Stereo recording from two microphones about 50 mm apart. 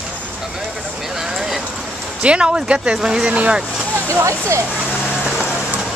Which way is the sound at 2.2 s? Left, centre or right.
Centre.